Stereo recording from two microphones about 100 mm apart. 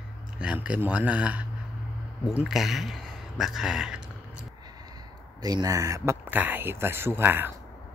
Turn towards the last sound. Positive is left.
turn(degrees=-20)  # may be behind; listen again after turning